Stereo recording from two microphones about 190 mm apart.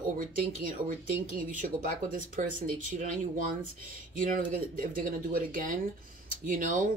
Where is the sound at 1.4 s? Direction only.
45° right (ahead or behind).